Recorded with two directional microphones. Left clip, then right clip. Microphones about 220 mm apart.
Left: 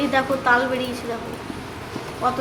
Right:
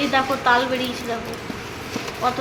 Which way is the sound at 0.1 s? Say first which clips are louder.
Right 1 dB; 10° right (ahead or behind).